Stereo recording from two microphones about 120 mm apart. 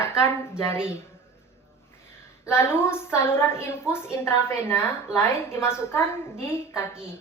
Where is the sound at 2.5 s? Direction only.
20° left (ahead or behind).